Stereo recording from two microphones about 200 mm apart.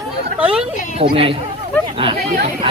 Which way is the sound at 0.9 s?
30° right (ahead or behind).